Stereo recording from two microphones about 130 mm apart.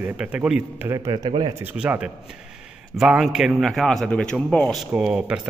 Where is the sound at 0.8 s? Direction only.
25° right (ahead or behind).